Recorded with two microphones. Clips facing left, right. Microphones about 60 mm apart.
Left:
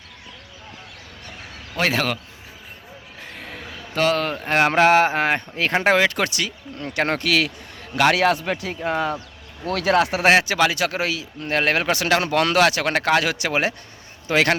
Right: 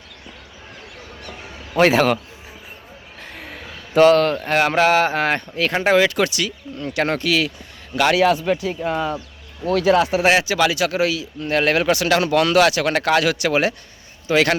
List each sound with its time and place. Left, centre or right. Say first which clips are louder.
1.7 s speech: right 7 dB; centre
3.3 s a sound: even; centre
4.2 s speech: right 6 dB; centre
4.4 s speech: even; left
5.8 s speech: right 3 dB; left
7.2 s speech: right 1 dB; left
9.7 s speech: right 3 dB; left
10.3 s speech: even; left